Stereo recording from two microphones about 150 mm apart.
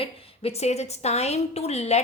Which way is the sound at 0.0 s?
45° left (ahead or behind).